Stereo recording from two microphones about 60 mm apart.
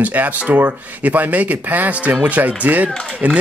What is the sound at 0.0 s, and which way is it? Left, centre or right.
Speech, right.